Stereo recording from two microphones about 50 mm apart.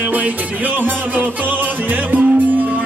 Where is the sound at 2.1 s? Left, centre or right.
Right.